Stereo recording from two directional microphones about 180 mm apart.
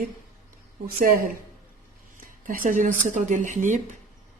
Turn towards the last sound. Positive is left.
turn(degrees=-45)  # may be behind; listen again after turning